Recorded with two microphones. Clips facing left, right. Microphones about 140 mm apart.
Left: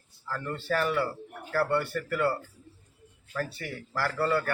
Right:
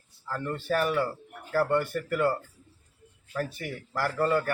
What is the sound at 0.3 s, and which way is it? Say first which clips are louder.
A man's voice: right 2 dB; 15° right (ahead or behind).